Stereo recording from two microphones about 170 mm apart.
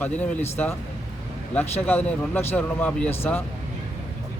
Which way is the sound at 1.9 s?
10° left (ahead or behind).